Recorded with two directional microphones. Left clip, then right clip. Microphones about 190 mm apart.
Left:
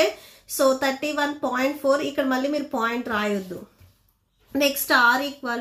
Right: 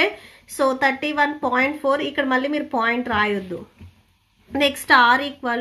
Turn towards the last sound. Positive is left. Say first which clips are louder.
# right 3 dB
turn(degrees=-40)  # may be behind; listen again after turning